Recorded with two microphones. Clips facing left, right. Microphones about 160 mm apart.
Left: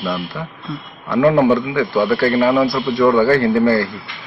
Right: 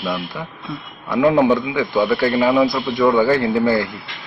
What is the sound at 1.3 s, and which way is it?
Speech, 15° right (ahead or behind).